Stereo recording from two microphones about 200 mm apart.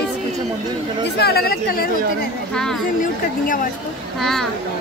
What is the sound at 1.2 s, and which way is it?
Speech, 50° left (ahead or behind).